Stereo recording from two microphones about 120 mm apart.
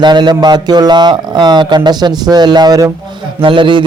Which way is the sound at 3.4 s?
45° right (ahead or behind).